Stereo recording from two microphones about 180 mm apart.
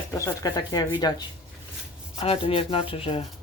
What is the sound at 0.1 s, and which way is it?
Speech, 20° left (ahead or behind).